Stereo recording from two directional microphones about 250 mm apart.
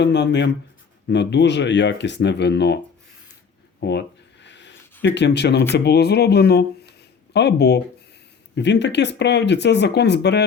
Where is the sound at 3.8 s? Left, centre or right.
Left.